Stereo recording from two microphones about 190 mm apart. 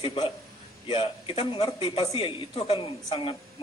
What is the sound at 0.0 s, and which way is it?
A man's voice, 30° left (ahead or behind).